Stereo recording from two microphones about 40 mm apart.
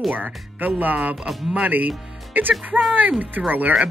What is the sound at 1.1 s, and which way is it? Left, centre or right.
Speech, centre.